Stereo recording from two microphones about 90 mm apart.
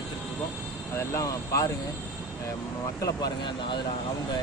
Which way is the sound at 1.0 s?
35° left (ahead or behind).